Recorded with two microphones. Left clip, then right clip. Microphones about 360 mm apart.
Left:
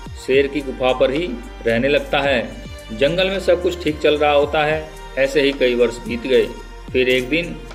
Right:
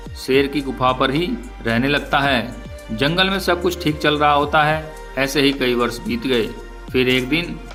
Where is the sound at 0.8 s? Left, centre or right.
Right.